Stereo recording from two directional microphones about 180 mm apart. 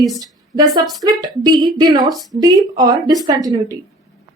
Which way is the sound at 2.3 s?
20° right (ahead or behind).